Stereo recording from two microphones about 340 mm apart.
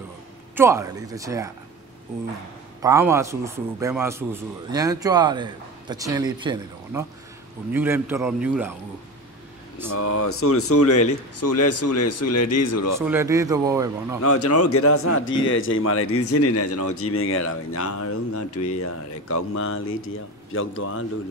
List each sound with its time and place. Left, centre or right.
0.6 s a man's voice: centre
2.8 s a man's voice: centre
9.9 s a man's voice: left
12.9 s a man's voice: centre
14.2 s a man's voice: left